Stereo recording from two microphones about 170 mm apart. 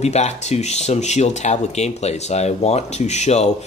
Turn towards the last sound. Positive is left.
turn(degrees=40)  # may be behind; listen again after turning